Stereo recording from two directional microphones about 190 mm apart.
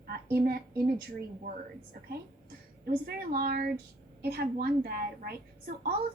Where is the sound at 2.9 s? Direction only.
50° right (ahead or behind).